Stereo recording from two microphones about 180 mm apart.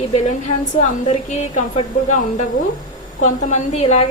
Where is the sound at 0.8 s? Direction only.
40° left (ahead or behind).